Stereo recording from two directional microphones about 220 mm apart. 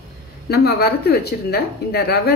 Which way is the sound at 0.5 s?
45° left (ahead or behind).